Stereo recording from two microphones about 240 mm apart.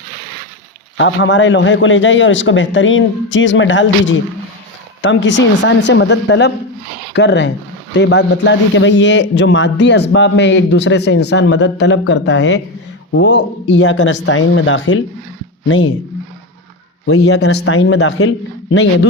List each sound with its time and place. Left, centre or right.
0.9 s a man's voice: left
17.2 s a man's voice: left